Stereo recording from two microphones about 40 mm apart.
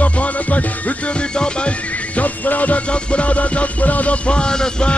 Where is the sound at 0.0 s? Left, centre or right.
Left.